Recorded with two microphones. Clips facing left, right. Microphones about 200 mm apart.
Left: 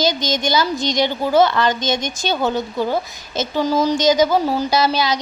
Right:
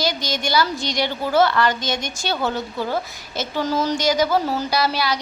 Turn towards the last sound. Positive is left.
turn(degrees=20)  # may be behind; listen again after turning